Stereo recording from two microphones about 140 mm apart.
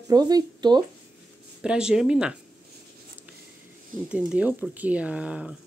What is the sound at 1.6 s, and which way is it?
Speech, 5° right (ahead or behind).